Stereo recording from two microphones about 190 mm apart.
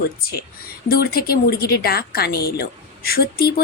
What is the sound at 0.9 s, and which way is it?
A woman's voice, 50° left (ahead or behind).